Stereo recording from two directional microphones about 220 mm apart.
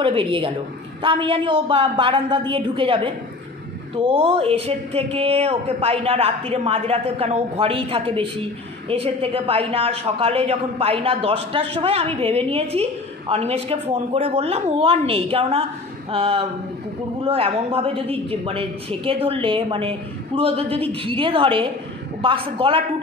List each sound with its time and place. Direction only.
0.0 s speech: 25° right (ahead or behind)